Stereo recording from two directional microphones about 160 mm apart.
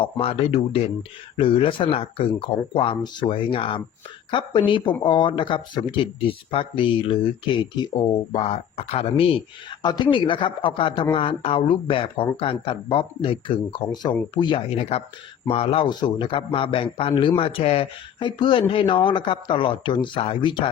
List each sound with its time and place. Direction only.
0.0 s speech: 35° left (ahead or behind)
14.8 s speech: 40° left (ahead or behind)